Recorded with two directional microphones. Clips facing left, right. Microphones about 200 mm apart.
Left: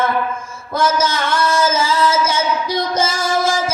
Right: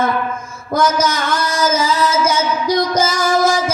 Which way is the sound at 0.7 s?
25° left (ahead or behind).